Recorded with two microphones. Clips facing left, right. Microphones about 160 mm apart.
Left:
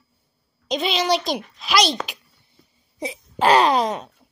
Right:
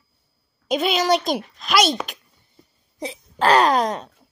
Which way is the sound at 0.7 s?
5° right (ahead or behind).